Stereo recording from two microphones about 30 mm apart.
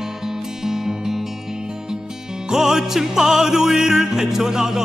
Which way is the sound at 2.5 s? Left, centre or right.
Centre.